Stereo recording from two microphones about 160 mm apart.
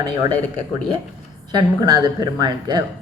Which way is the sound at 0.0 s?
25° right (ahead or behind).